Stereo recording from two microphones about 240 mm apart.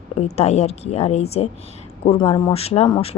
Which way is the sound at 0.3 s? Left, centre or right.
Left.